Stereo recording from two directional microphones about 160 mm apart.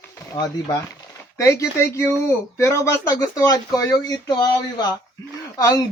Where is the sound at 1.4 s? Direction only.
20° left (ahead or behind).